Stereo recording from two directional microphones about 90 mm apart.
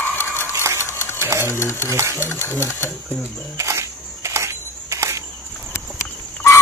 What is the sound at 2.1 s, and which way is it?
Speech, 30° left (ahead or behind).